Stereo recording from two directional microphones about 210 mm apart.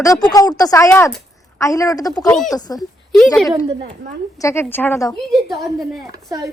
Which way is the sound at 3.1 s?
Centre (ahead or behind).